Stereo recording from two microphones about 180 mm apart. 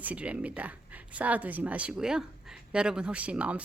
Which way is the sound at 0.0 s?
10° right (ahead or behind).